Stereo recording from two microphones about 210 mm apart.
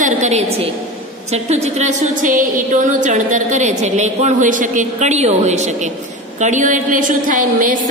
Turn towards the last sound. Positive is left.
turn(degrees=-40)  # may be behind; listen again after turning